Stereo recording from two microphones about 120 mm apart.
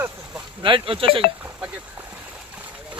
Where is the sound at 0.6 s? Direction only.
45° right (ahead or behind).